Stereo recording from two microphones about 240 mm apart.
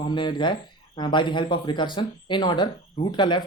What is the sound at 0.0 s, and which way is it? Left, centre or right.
Speech, centre.